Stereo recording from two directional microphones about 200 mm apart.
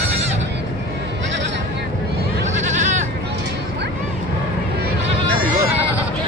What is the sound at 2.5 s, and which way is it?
Goat, 35° right (ahead or behind).